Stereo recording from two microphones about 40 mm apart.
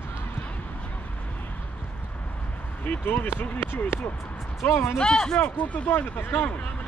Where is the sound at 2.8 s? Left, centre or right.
Left.